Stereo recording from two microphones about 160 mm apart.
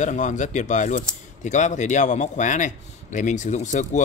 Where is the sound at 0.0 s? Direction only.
50° left (ahead or behind).